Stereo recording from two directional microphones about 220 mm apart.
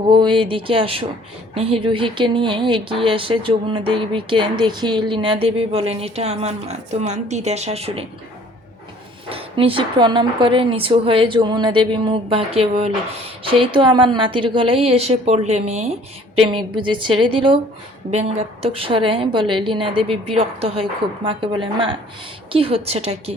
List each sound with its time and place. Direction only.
0.1 s speech: 20° right (ahead or behind)
9.3 s speech: 25° right (ahead or behind)